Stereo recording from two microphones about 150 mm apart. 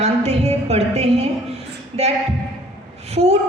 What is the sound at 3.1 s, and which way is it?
Speech, 45° right (ahead or behind).